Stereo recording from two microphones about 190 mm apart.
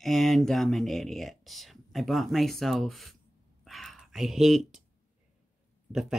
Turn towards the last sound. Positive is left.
turn(degrees=-5)  # may be behind; listen again after turning